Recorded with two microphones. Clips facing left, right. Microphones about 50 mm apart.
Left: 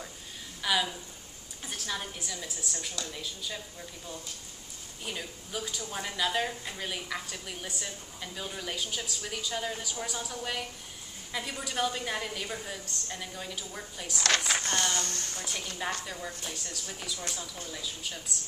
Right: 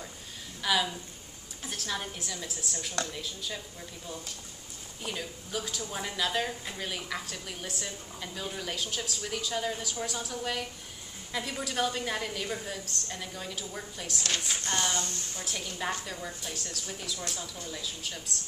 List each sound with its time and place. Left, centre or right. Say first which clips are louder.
0.6 s a woman's voice: right 1 dB; centre
5.0 s a woman's voice: right 2 dB; centre
14.2 s speech: left 6 dB; left
14.7 s speech: right 4 dB; centre
15.0 s a woman's voice: even; left
15.4 s a woman's voice: right 1 dB; centre